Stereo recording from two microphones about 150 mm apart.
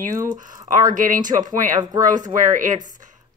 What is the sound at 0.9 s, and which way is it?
Speech, 60° right (ahead or behind).